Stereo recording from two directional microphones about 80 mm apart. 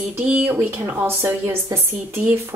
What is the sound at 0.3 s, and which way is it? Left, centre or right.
A woman's voice, right.